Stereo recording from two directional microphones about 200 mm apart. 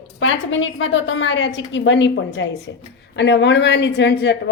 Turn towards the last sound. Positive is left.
turn(degrees=60)  # may be behind; listen again after turning